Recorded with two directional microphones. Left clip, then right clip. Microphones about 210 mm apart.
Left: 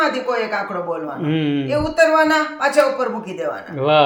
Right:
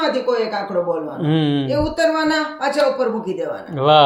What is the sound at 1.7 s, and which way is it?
Speech, 30° left (ahead or behind).